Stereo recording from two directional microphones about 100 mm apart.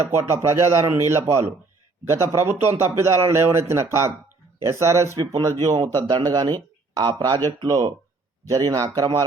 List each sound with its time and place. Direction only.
0.0 s speech: 25° right (ahead or behind)